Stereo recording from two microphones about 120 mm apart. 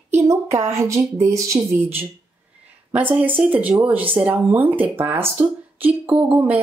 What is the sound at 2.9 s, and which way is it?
Speech, 15° right (ahead or behind).